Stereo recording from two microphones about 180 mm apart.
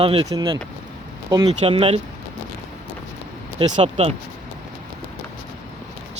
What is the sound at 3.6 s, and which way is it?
Speech, 30° right (ahead or behind).